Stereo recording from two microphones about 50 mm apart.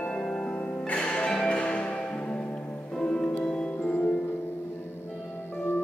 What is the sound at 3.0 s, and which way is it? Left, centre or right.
Music, centre.